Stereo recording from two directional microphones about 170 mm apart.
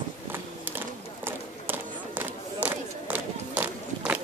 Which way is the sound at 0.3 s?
10° right (ahead or behind).